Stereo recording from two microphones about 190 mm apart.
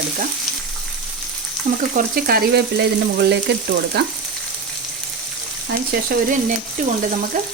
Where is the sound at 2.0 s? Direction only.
50° right (ahead or behind).